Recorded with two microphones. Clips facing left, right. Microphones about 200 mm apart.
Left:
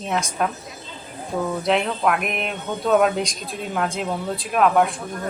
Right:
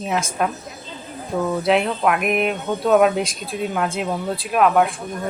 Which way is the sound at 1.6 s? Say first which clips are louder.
Right 2 dB; 5° right (ahead or behind).